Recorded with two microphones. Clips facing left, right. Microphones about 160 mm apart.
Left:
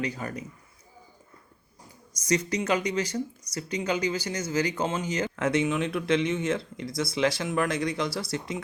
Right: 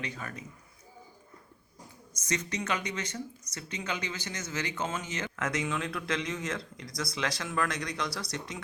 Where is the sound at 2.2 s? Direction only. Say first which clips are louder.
Left 7 dB; 30° left (ahead or behind).